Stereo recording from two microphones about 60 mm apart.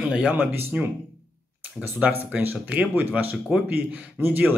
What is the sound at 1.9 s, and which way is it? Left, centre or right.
Speech, right.